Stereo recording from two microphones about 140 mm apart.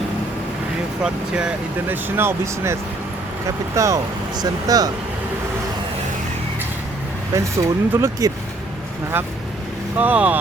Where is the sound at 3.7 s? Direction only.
25° right (ahead or behind).